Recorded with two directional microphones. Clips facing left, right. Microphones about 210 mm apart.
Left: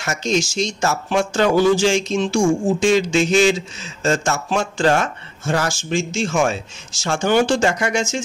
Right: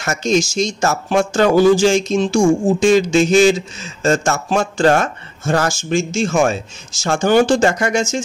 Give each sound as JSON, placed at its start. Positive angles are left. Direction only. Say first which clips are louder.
{"t": 0.0, "sound": "speech", "louder": "right 4 dB", "side_deg": -45}